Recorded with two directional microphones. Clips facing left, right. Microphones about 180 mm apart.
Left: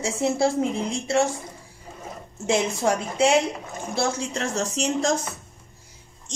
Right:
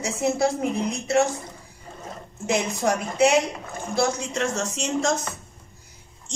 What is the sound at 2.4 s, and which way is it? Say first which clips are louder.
A woman's voice: left 1 dB; 25° left (ahead or behind).